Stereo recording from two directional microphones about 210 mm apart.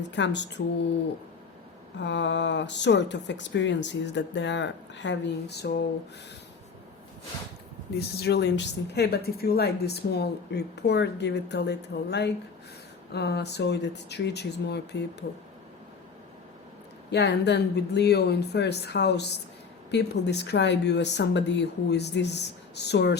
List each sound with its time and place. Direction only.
0.1 s speech: 55° left (ahead or behind)
2.0 s speech: 60° left (ahead or behind)
7.9 s speech: 50° left (ahead or behind)
17.1 s speech: 55° left (ahead or behind)